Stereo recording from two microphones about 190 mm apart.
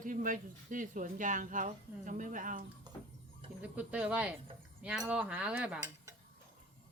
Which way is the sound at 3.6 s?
5° right (ahead or behind).